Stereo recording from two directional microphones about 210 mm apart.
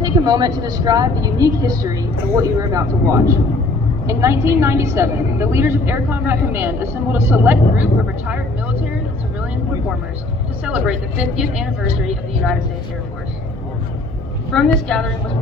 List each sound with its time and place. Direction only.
0.0 s a woman's voice: 20° right (ahead or behind)
10.6 s a woman's voice: 5° right (ahead or behind)
14.5 s a woman's voice: 5° left (ahead or behind)